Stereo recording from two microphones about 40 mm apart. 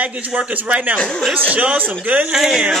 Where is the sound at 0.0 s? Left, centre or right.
Right.